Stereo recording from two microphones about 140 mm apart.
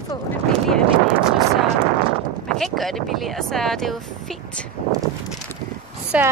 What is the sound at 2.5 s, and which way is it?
Speech, centre (ahead or behind).